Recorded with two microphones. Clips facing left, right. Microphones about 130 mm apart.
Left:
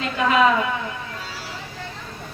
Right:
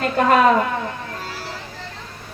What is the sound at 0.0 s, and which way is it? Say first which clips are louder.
Speech: right 3 dB; 50° right (ahead or behind).